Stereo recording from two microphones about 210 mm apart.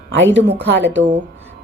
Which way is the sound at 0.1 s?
60° right (ahead or behind).